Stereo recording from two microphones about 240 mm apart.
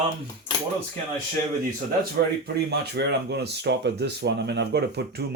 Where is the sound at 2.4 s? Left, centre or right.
Right.